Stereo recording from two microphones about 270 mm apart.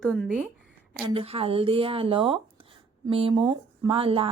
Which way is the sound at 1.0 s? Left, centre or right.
Right.